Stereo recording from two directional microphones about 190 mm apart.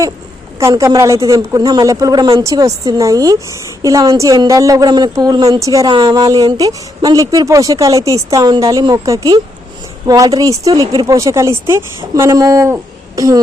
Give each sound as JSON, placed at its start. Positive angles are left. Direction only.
{"t": 0.6, "sound": "a woman's voice", "side_deg": -15}